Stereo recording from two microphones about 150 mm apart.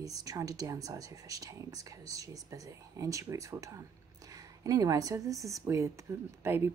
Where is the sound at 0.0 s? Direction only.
25° right (ahead or behind).